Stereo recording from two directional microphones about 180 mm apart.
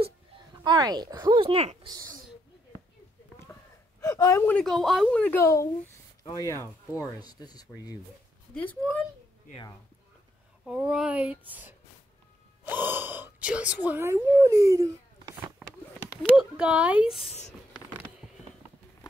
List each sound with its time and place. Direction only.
0.7 s speech: 25° right (ahead or behind)
4.0 s speech: 20° left (ahead or behind)
8.5 s speech: 5° left (ahead or behind)
10.6 s a child's voice: 5° right (ahead or behind)
16.2 s speech: 5° right (ahead or behind)